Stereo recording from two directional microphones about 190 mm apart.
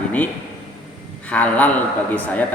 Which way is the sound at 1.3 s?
5° left (ahead or behind).